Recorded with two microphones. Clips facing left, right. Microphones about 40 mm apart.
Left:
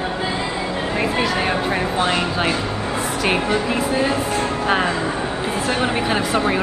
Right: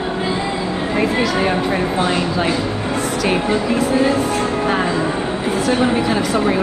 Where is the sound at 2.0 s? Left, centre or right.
Left.